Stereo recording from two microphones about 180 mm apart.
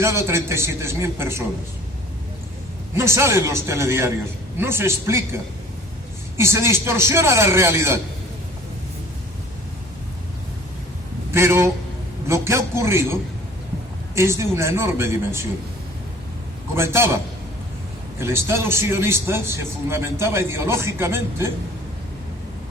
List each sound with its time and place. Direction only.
0.0 s a man's voice: 15° right (ahead or behind)
2.9 s a man's voice: 15° right (ahead or behind)
11.3 s a man's voice: 15° right (ahead or behind)
14.2 s a man's voice: 15° right (ahead or behind)
16.7 s a man's voice: 15° right (ahead or behind)
18.2 s a man's voice: 15° right (ahead or behind)